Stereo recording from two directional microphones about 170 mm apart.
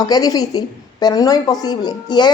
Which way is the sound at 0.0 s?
20° left (ahead or behind).